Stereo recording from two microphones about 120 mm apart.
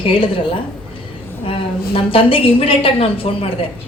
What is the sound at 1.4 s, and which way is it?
A woman's voice, 50° left (ahead or behind).